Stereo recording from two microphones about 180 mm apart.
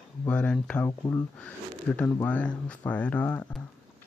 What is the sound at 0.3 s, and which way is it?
Speech, 5° left (ahead or behind).